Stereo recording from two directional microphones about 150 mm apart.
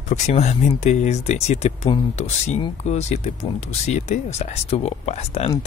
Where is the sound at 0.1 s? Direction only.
45° left (ahead or behind).